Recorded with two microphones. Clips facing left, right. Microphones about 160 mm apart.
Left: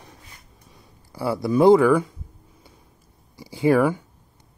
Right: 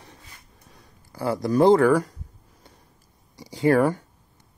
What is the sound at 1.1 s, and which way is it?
Speech, 10° left (ahead or behind).